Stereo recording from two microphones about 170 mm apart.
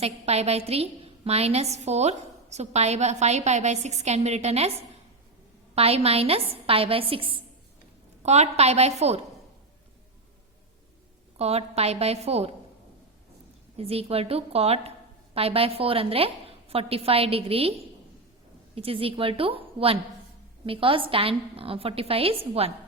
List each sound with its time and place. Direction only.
0.0 s a woman's voice: 40° right (ahead or behind)
5.7 s a woman's voice: 35° right (ahead or behind)
11.3 s a woman's voice: 40° right (ahead or behind)
13.7 s a woman's voice: 35° right (ahead or behind)